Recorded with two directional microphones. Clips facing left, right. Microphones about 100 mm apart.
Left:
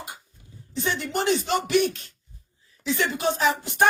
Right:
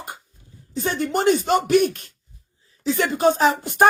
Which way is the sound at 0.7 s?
40° right (ahead or behind).